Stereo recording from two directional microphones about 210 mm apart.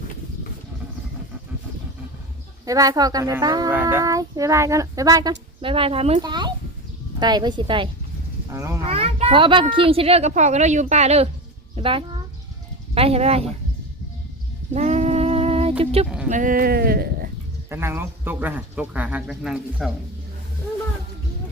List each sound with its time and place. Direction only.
2.6 s a child's voice: 15° right (ahead or behind)
8.8 s a child's voice: 30° right (ahead or behind)
14.7 s a sound: 35° right (ahead or behind)
15.8 s speech: 30° right (ahead or behind)
16.3 s speech: 40° right (ahead or behind)
17.7 s a child's voice: 10° right (ahead or behind)